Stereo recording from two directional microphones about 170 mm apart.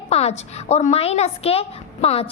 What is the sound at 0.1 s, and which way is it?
A woman's voice, 40° left (ahead or behind).